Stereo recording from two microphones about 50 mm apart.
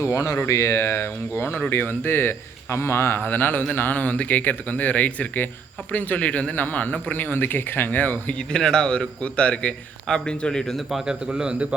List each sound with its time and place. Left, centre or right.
0.0 s a man's voice: left
3.2 s speech: left
4.0 s speech: left
8.4 s a man's voice: centre
10.8 s a man's voice: centre
11.0 s a man's voice: centre